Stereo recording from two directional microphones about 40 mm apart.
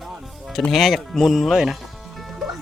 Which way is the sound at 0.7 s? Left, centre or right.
Centre.